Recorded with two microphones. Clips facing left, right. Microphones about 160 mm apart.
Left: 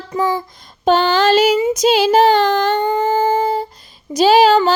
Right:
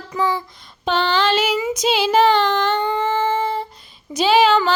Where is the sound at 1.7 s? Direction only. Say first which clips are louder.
Left 5 dB; 45° left (ahead or behind).